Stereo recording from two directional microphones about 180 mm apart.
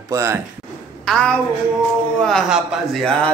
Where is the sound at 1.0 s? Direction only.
5° left (ahead or behind).